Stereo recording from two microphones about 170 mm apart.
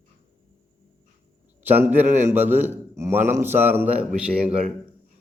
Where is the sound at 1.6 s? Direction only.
10° right (ahead or behind).